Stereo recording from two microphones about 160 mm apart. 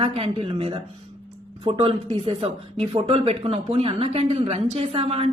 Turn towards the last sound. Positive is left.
turn(degrees=-35)  # may be behind; listen again after turning